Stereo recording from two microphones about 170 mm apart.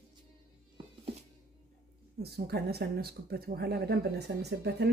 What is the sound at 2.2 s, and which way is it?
Speech, 70° right (ahead or behind).